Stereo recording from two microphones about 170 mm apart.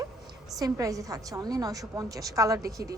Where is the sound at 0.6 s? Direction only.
20° right (ahead or behind).